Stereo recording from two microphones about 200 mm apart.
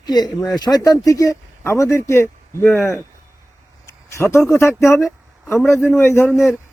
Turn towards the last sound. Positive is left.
turn(degrees=-5)  # may be behind; listen again after turning